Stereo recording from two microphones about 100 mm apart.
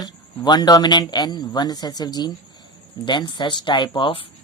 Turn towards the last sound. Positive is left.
turn(degrees=55)  # may be behind; listen again after turning